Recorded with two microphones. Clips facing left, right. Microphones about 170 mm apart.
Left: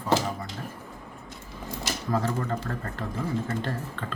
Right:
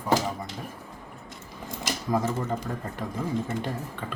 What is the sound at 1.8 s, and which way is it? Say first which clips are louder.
Speech: right 1 dB; 15° right (ahead or behind).